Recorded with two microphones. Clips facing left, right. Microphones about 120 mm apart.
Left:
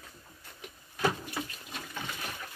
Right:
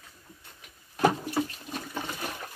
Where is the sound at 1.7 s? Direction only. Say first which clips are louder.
Right 5 dB; 40° right (ahead or behind).